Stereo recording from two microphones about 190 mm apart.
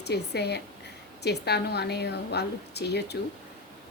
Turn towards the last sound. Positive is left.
turn(degrees=60)  # may be behind; listen again after turning